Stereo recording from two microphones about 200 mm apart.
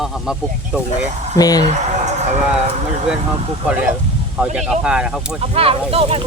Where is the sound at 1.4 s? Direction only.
20° left (ahead or behind).